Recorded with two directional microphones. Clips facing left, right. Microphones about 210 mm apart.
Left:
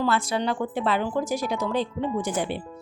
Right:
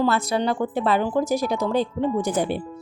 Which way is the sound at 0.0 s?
40° right (ahead or behind).